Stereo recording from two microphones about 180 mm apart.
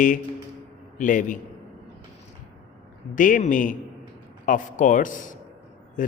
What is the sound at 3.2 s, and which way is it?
A man's voice, 45° left (ahead or behind).